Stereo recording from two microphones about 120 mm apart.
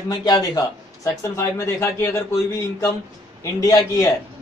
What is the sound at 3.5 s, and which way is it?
Speech, 25° left (ahead or behind).